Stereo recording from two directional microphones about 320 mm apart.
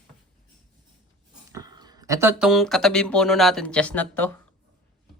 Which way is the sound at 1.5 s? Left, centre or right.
Centre.